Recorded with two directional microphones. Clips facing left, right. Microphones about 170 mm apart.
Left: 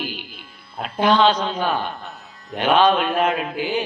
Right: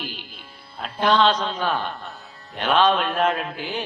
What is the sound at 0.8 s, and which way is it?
A man's voice, 5° left (ahead or behind).